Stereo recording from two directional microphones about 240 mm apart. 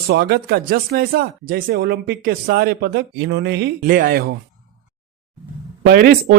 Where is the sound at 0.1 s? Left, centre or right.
Right.